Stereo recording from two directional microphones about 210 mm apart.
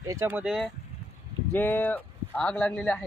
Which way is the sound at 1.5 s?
10° left (ahead or behind).